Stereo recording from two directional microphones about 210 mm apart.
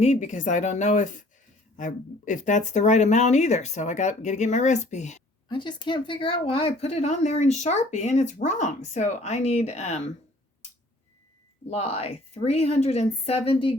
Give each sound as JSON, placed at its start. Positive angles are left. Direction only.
{"t": 0.0, "sound": "speech", "side_deg": 35}
{"t": 5.5, "sound": "speech", "side_deg": 20}
{"t": 11.7, "sound": "a woman's voice", "side_deg": 30}